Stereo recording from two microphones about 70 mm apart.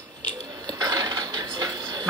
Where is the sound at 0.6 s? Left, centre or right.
Right.